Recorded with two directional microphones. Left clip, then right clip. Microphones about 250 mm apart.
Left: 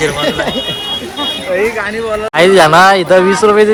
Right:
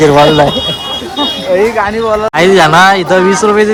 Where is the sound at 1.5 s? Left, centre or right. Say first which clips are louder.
Right 5 dB; right.